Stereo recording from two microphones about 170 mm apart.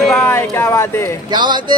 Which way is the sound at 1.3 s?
25° right (ahead or behind).